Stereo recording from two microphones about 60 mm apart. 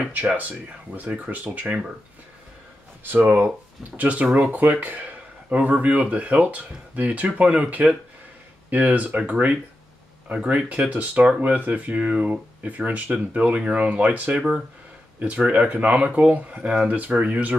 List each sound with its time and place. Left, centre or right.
0.4 s speech: right
3.2 s speech: right
3.4 s speech: right
14.3 s speech: centre